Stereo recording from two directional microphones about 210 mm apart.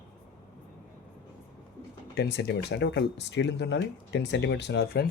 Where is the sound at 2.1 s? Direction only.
50° left (ahead or behind).